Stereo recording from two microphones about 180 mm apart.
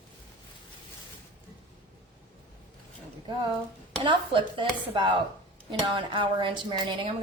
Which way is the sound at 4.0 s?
25° right (ahead or behind).